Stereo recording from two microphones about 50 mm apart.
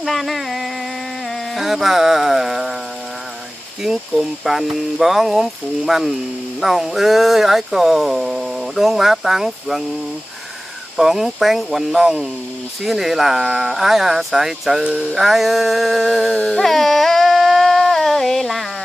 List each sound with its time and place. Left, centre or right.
0.0 s music: centre
1.5 s speech: centre
3.8 s speech: centre
11.0 s speech: centre
14.8 s music: right
15.1 s speech: centre
16.3 s a sound: centre